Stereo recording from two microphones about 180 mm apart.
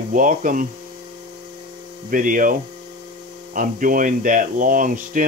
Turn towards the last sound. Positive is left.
turn(degrees=-50)  # may be behind; listen again after turning